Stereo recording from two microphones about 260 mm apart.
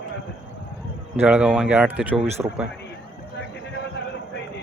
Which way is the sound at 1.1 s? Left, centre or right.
Centre.